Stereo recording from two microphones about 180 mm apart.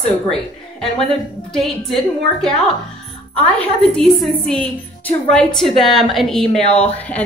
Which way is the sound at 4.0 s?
Centre (ahead or behind).